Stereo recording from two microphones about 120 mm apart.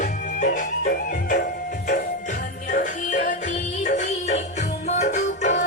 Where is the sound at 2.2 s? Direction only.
90° left.